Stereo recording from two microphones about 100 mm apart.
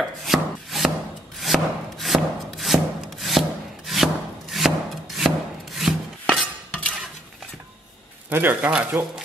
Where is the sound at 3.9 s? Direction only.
Centre (ahead or behind).